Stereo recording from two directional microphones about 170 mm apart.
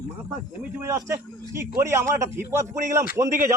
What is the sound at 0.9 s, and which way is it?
A man's voice, 15° right (ahead or behind).